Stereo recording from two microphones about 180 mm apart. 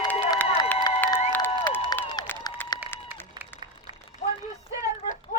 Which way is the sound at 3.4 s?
25° right (ahead or behind).